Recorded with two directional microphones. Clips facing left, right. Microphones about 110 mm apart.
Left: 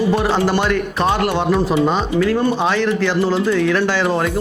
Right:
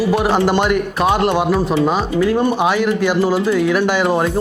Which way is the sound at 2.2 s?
20° right (ahead or behind).